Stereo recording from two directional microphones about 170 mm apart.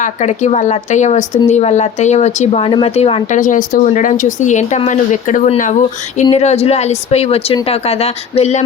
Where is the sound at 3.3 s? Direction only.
50° left (ahead or behind).